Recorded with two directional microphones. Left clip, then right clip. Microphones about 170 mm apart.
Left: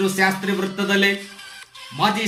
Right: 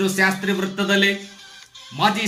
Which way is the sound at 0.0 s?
20° right (ahead or behind).